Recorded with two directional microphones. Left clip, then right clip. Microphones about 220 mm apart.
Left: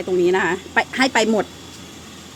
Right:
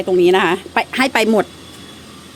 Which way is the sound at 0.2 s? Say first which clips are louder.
Right 5 dB; 15° right (ahead or behind).